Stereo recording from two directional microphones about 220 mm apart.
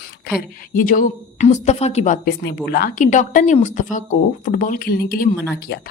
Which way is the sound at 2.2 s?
45° left (ahead or behind).